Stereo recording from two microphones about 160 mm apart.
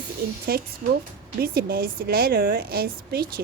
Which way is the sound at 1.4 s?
70° right (ahead or behind).